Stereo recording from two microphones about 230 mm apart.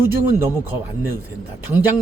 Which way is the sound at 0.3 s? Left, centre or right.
Centre.